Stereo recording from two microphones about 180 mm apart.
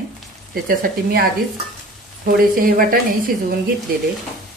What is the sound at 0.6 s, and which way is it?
Speech, 55° right (ahead or behind).